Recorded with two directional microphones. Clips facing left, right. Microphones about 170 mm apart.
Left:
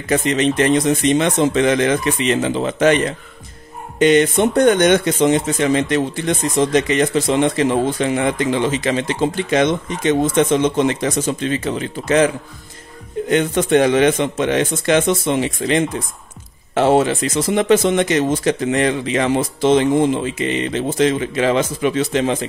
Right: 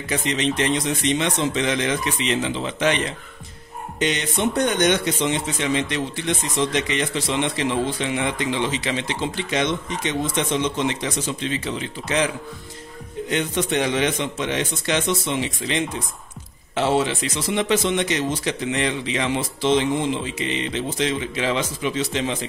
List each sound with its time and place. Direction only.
0.1 s speech: 50° left (ahead or behind)
13.3 s speech: 50° left (ahead or behind)